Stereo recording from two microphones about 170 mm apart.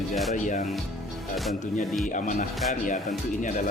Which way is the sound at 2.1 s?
50° left (ahead or behind).